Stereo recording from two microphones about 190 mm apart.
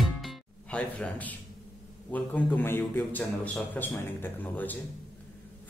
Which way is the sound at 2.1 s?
10° left (ahead or behind).